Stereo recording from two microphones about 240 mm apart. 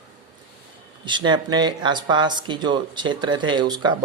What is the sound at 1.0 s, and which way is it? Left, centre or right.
Speech, centre.